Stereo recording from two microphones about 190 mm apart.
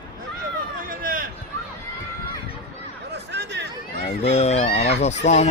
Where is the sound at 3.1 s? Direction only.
65° right (ahead or behind).